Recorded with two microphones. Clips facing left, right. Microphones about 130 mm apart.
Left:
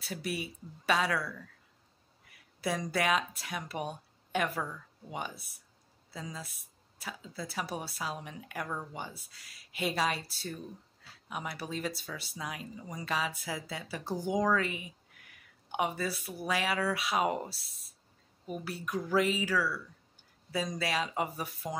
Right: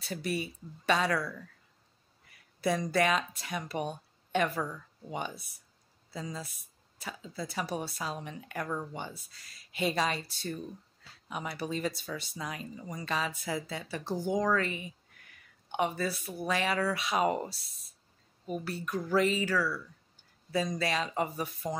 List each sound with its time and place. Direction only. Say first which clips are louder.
0.0 s a woman's voice: right 3 dB; 5° left (ahead or behind)
2.3 s a woman's voice: right 4 dB; 5° left (ahead or behind)